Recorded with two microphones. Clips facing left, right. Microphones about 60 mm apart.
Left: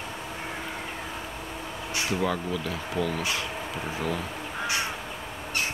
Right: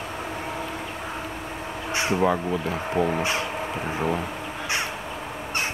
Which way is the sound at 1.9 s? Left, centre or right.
Right.